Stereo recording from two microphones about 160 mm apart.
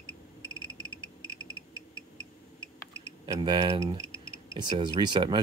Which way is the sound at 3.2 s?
30° right (ahead or behind).